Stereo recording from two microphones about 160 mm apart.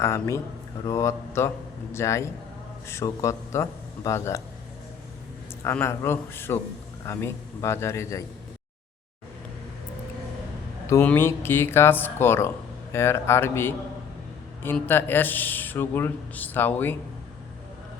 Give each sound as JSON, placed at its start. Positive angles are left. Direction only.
{"t": 0.0, "sound": "speech", "side_deg": 15}
{"t": 5.6, "sound": "speech", "side_deg": 15}
{"t": 10.8, "sound": "speech", "side_deg": 15}